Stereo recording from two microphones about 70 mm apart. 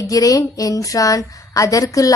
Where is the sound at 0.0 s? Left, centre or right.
Left.